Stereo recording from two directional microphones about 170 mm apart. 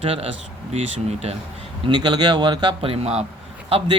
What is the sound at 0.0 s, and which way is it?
Speech, 35° right (ahead or behind).